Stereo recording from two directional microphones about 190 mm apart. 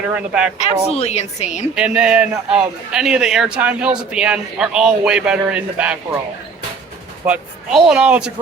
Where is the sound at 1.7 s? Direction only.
5° right (ahead or behind).